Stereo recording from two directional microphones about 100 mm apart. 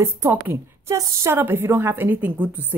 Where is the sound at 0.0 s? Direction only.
25° right (ahead or behind).